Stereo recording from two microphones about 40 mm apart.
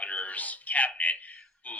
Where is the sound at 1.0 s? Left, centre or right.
Left.